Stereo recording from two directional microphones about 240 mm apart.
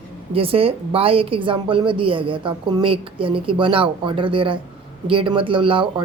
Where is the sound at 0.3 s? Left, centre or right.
Right.